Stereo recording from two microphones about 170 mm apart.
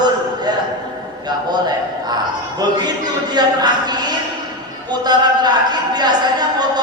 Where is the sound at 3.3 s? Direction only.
25° right (ahead or behind).